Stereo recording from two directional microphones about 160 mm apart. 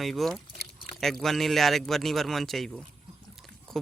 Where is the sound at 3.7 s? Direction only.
Centre (ahead or behind).